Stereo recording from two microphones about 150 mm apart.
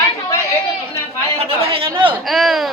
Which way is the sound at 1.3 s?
40° right (ahead or behind).